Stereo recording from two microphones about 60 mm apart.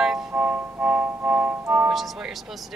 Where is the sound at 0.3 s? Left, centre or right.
Right.